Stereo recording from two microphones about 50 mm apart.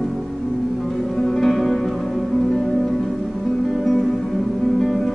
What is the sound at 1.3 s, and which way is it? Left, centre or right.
Music, centre.